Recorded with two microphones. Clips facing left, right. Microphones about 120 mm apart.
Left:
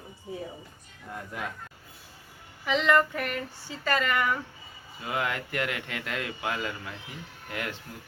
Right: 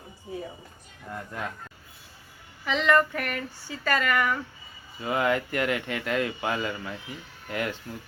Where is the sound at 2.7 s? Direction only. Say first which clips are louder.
Right 1 dB; 15° left (ahead or behind).